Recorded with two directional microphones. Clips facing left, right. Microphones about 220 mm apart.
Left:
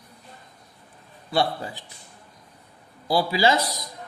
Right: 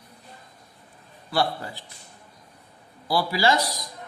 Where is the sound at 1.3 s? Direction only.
20° left (ahead or behind).